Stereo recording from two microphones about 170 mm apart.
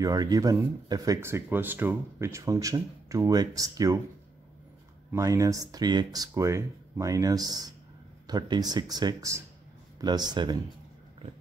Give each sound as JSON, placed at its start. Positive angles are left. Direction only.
{"t": 0.0, "sound": "speech", "side_deg": -20}
{"t": 5.1, "sound": "speech", "side_deg": -20}